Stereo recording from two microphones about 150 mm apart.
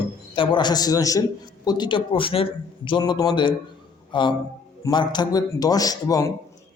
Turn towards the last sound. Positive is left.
turn(degrees=20)  # may be behind; listen again after turning